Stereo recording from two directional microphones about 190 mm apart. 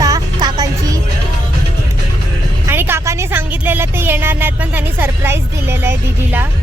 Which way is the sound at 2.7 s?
10° right (ahead or behind).